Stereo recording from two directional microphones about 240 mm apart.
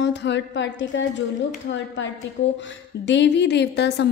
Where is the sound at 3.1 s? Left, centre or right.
Left.